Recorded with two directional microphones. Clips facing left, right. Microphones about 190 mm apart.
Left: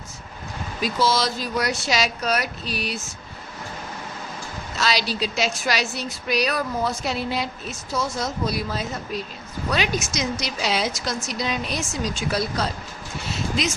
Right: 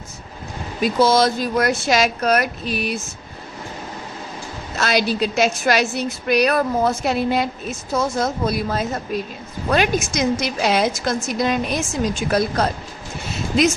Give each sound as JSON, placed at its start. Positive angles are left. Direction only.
{"t": 0.8, "sound": "a woman's voice", "side_deg": -55}
{"t": 4.8, "sound": "a woman's voice", "side_deg": -55}